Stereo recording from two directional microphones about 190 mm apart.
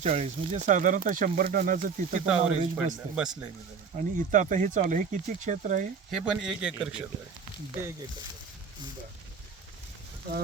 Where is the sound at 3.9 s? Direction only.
40° right (ahead or behind).